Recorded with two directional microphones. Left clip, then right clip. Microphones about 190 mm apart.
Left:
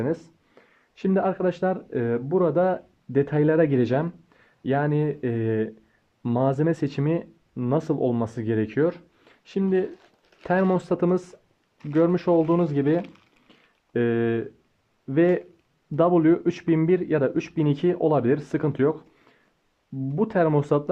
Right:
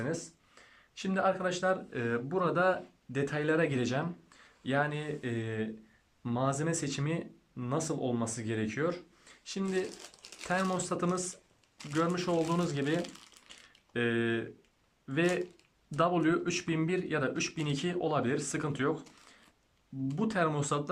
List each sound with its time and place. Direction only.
0.0 s speech: 45° left (ahead or behind)